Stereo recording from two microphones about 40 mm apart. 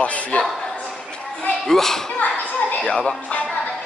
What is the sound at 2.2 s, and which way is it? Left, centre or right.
Speech, left.